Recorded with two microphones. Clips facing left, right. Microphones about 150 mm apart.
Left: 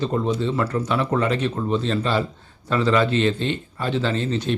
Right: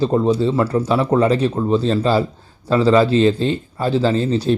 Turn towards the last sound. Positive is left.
turn(degrees=-35)  # may be behind; listen again after turning